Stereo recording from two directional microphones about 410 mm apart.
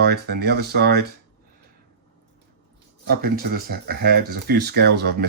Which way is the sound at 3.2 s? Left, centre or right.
Right.